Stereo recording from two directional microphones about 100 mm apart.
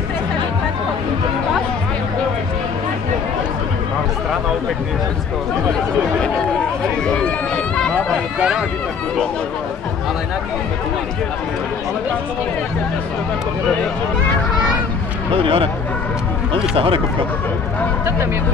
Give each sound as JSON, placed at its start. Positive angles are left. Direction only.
{"t": 7.1, "sound": "run", "side_deg": 10}
{"t": 8.4, "sound": "speech", "side_deg": -10}
{"t": 15.3, "sound": "speech", "side_deg": -65}